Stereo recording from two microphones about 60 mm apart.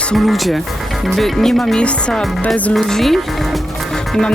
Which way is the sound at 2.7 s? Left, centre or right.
Centre.